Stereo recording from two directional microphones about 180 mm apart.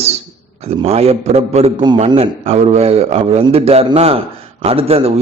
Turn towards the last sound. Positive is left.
turn(degrees=-35)  # may be behind; listen again after turning